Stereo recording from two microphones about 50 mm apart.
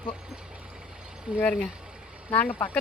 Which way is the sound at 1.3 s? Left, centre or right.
Right.